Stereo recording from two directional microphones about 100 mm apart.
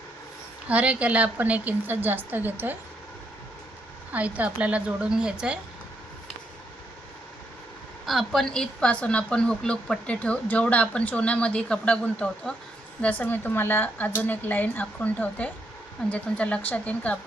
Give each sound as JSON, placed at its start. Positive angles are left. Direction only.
{"t": 0.7, "sound": "a woman's voice", "side_deg": -15}
{"t": 4.1, "sound": "a woman's voice", "side_deg": -15}
{"t": 8.0, "sound": "a woman's voice", "side_deg": 0}